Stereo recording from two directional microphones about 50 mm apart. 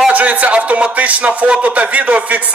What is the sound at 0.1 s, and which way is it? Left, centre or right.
A man's voice, right.